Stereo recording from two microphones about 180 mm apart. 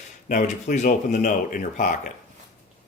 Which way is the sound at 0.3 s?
40° left (ahead or behind).